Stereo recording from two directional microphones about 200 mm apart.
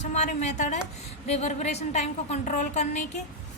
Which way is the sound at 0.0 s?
35° left (ahead or behind).